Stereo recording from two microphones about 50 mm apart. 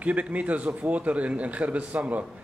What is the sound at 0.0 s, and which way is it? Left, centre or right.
A man's voice, right.